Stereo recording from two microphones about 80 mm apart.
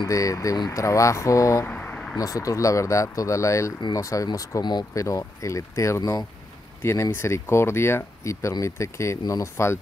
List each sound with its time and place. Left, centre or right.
0.1 s speech: left
1.7 s a sound: centre
2.1 s speech: left
6.8 s speech: left